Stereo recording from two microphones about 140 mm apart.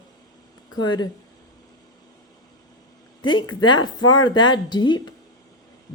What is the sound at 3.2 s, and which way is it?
Speech, 35° left (ahead or behind).